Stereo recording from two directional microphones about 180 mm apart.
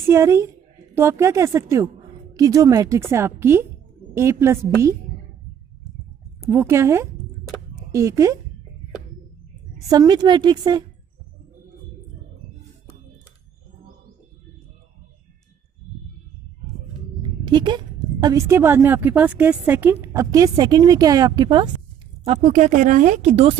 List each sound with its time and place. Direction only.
0.0 s a woman's voice: 15° right (ahead or behind)
6.5 s a woman's voice: 15° right (ahead or behind)
9.8 s a woman's voice: 20° right (ahead or behind)
17.2 s a woman's voice: 25° right (ahead or behind)
22.2 s speech: 35° right (ahead or behind)